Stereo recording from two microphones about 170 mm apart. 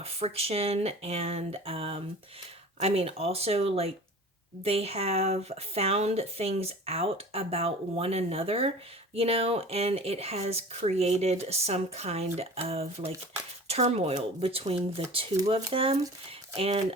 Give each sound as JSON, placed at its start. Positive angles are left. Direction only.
{"t": 0.0, "sound": "a woman's voice", "side_deg": -35}